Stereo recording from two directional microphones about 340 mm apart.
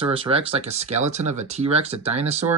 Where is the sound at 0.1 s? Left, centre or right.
Centre.